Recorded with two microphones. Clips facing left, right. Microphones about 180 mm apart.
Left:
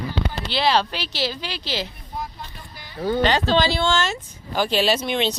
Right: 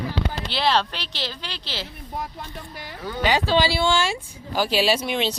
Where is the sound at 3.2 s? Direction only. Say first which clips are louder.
Even; 10° right (ahead or behind).